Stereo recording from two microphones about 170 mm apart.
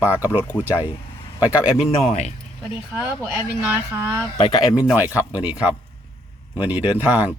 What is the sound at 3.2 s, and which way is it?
A man's voice, 5° right (ahead or behind).